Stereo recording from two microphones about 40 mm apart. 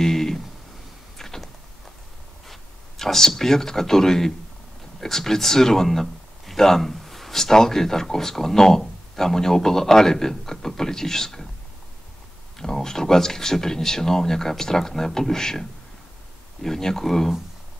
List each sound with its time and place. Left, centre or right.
0.0 s a sound: centre
2.4 s speech: centre
12.5 s speech: centre
16.6 s speech: centre